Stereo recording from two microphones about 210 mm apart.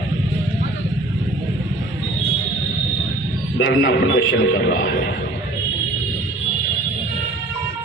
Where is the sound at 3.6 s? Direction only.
55° left (ahead or behind).